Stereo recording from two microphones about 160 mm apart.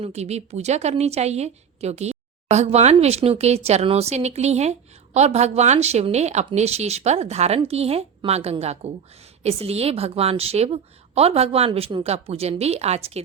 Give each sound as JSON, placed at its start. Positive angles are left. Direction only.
{"t": 0.0, "sound": "a woman's voice", "side_deg": -45}